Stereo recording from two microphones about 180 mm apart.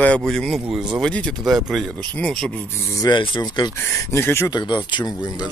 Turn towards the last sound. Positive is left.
turn(degrees=20)  # may be behind; listen again after turning